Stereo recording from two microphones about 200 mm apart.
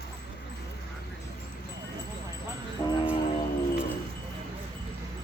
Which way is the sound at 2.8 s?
20° left (ahead or behind).